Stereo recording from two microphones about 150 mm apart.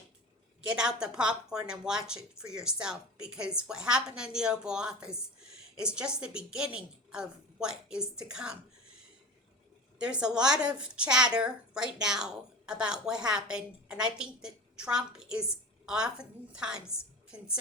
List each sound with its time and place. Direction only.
0.8 s a woman's voice: 5° right (ahead or behind)
10.0 s a woman's voice: 5° right (ahead or behind)